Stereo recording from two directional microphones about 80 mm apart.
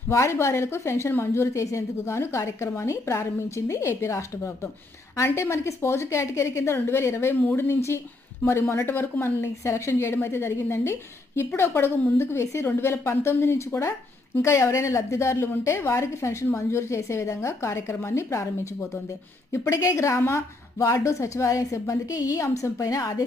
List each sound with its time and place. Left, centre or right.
0.1 s a woman's voice: left